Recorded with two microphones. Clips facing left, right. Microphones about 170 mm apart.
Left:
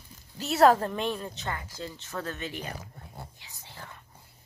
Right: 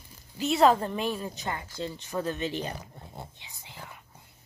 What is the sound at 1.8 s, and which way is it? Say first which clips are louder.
Speech: right 4 dB; 20° right (ahead or behind).